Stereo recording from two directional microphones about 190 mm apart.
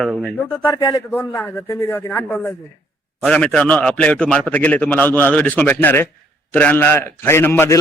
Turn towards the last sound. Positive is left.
turn(degrees=10)  # may be behind; listen again after turning